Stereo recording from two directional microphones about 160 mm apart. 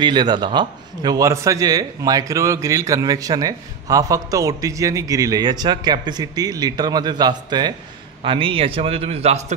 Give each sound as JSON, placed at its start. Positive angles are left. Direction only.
{"t": 0.0, "sound": "a man's voice", "side_deg": -25}